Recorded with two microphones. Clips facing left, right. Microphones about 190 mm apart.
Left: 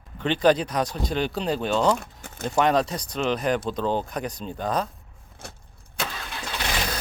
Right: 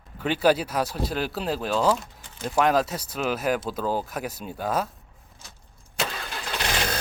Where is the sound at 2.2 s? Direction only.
45° left (ahead or behind).